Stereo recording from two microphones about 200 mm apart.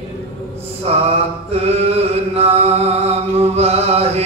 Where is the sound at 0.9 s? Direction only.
30° right (ahead or behind).